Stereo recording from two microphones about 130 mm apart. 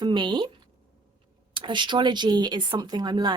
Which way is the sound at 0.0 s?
35° right (ahead or behind).